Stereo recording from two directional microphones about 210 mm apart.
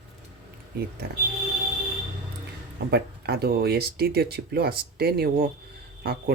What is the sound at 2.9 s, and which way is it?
Speech, 50° right (ahead or behind).